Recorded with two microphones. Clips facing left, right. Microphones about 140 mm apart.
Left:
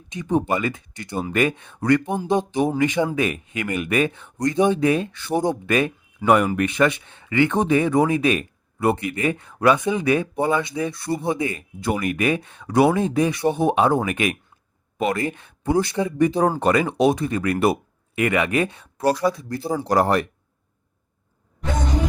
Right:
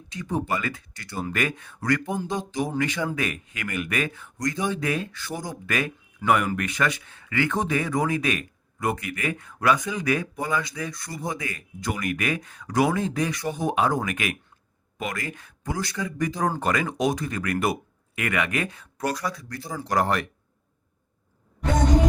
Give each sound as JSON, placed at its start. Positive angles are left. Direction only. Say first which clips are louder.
{"t": 0.1, "sound": "speech", "louder": "left 6 dB", "side_deg": 20}